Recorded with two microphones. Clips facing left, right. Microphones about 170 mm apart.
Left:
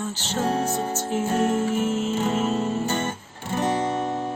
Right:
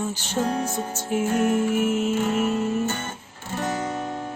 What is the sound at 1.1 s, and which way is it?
Music, 15° right (ahead or behind).